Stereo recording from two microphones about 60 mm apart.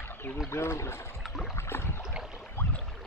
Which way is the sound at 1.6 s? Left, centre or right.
Left.